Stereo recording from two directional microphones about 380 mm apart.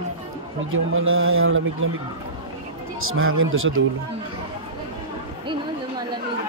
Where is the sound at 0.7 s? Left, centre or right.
Right.